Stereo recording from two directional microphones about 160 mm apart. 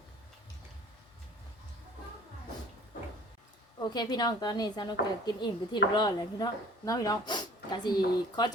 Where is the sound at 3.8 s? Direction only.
25° left (ahead or behind).